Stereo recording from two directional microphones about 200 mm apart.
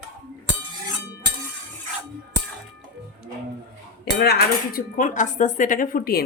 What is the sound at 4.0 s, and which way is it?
Speech, 50° left (ahead or behind).